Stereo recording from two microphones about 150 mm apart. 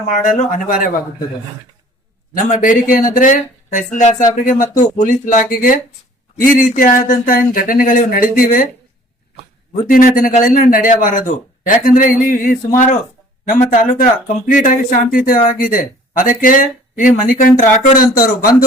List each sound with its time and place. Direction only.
0.1 s speech: 60° left (ahead or behind)
2.5 s speech: 60° left (ahead or behind)
9.9 s speech: 65° left (ahead or behind)